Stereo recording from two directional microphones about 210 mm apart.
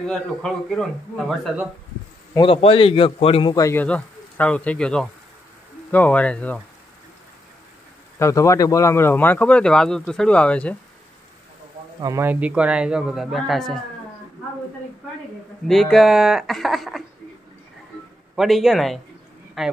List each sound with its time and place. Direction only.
0.0 s a man's voice: centre (ahead or behind)
2.3 s a man's voice: 25° left (ahead or behind); by 6.6 s 5° left (ahead or behind)
8.2 s a man's voice: 15° left (ahead or behind)
12.0 s a man's voice: 15° right (ahead or behind)
15.6 s a man's voice: centre (ahead or behind)
18.3 s a man's voice: centre (ahead or behind)